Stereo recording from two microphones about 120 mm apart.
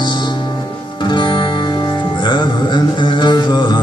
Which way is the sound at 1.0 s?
40° left (ahead or behind).